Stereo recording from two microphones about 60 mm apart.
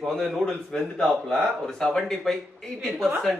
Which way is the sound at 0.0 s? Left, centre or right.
Centre.